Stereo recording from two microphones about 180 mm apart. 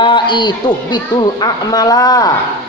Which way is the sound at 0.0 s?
25° left (ahead or behind).